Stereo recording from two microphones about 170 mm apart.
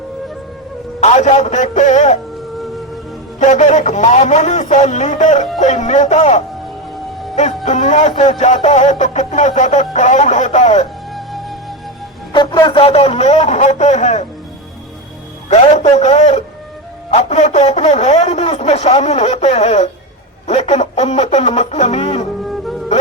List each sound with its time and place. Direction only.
1.0 s speech: 40° left (ahead or behind)
3.4 s speech: 45° left (ahead or behind)
11.1 s music: centre (ahead or behind)
12.3 s speech: 25° left (ahead or behind)
15.7 s speech: 40° left (ahead or behind)